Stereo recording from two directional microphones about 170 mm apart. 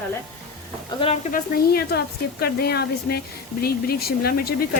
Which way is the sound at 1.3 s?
65° left (ahead or behind).